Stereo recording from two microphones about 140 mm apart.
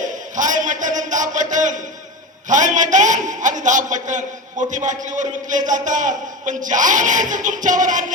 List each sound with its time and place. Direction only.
0.0 s a man's voice: 65° right (ahead or behind)